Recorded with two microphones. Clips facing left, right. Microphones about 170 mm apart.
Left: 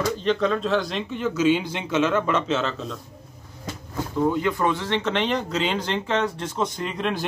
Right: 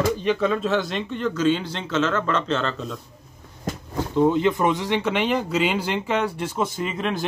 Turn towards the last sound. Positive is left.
turn(degrees=0)  # may be behind; listen again after turning